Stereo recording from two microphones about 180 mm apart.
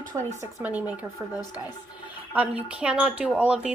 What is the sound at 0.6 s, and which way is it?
Speech, 10° right (ahead or behind).